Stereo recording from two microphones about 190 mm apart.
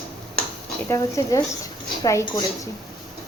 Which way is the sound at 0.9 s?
15° left (ahead or behind).